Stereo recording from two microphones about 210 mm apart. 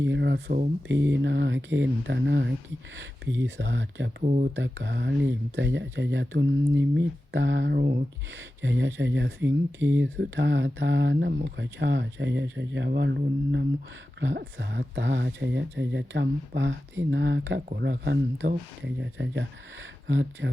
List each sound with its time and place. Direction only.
0.0 s speech: 60° right (ahead or behind)
0.9 s speech: 60° right (ahead or behind)
4.2 s speech: 40° right (ahead or behind)
4.5 s speech: 55° right (ahead or behind)
8.6 s speech: 60° right (ahead or behind)